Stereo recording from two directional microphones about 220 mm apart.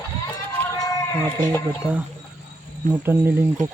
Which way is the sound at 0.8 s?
15° left (ahead or behind).